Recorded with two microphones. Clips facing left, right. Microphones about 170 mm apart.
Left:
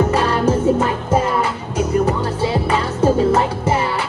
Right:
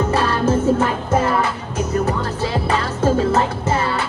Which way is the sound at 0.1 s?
15° left (ahead or behind).